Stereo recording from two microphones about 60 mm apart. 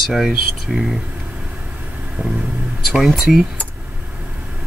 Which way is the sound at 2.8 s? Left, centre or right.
Centre.